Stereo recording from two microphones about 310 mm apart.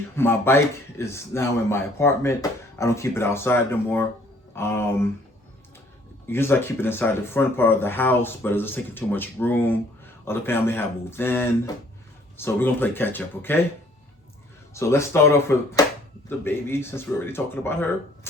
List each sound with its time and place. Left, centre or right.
0.2 s speech: centre
6.2 s speech: centre
14.7 s speech: centre